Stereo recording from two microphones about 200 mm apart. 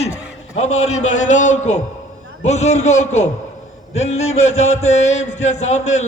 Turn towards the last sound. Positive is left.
turn(degrees=35)  # may be behind; listen again after turning